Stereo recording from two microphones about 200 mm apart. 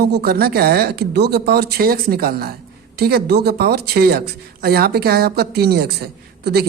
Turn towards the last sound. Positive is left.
turn(degrees=-55)  # may be behind; listen again after turning